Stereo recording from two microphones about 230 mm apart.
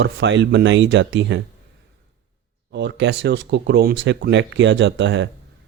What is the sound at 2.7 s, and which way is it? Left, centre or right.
Speech, right.